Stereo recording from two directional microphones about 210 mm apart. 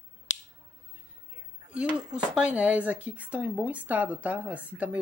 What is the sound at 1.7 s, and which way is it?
Speech, 5° right (ahead or behind).